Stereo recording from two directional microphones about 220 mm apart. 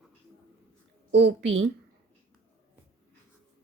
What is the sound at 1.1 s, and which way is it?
Speech, 50° right (ahead or behind).